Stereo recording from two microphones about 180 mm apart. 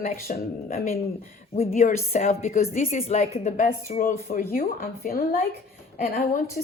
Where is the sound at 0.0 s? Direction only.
50° left (ahead or behind).